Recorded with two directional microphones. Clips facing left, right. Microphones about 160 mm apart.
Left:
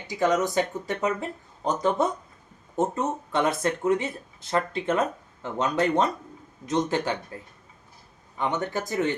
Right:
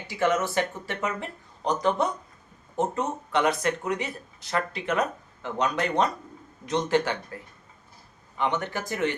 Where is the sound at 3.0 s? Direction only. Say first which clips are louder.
Even; 25° left (ahead or behind).